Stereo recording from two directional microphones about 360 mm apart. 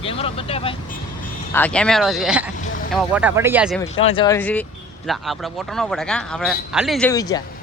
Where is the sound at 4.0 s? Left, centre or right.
Centre.